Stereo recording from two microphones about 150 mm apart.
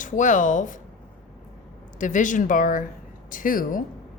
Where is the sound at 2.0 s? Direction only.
60° left (ahead or behind).